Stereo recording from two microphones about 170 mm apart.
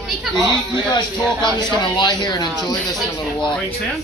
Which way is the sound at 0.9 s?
25° left (ahead or behind).